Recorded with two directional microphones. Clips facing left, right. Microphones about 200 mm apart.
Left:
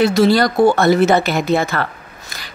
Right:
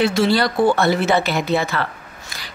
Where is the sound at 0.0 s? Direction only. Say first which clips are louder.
Left 4 dB; 40° left (ahead or behind).